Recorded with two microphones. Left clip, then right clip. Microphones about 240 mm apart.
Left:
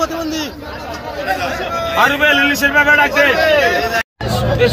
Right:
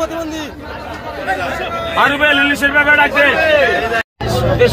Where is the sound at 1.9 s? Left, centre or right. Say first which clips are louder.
Even; left.